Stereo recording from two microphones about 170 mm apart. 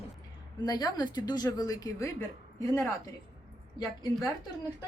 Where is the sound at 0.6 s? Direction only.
25° left (ahead or behind).